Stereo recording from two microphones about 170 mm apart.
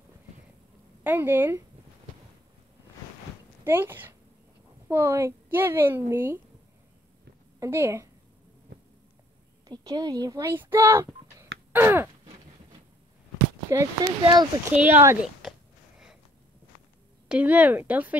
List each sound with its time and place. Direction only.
1.0 s a woman's voice: 10° right (ahead or behind)
3.6 s a woman's voice: 10° right (ahead or behind)
7.6 s a woman's voice: 15° right (ahead or behind)
9.7 s a child's voice: 20° right (ahead or behind)
11.7 s a sound: 10° right (ahead or behind)
13.7 s a child's voice: 20° right (ahead or behind)
14.7 s a woman's voice: 10° right (ahead or behind)
15.4 s a sound: centre (ahead or behind)
17.3 s a woman's voice: 10° right (ahead or behind)